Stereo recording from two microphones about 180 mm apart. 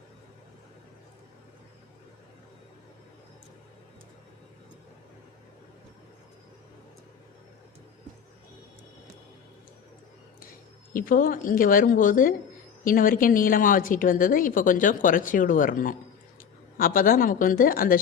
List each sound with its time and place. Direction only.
10.9 s a woman's voice: 50° left (ahead or behind)